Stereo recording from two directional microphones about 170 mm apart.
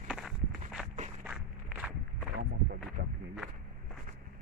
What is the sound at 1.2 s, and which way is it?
Walk, 5° right (ahead or behind).